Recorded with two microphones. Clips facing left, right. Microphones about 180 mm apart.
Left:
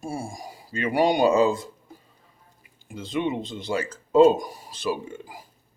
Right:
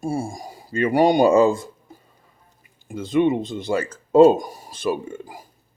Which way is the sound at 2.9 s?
50° right (ahead or behind).